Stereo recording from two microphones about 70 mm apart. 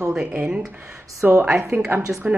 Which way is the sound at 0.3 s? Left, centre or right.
Centre.